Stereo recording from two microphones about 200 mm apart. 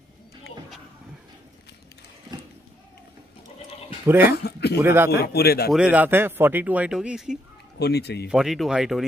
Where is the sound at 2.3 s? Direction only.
20° right (ahead or behind).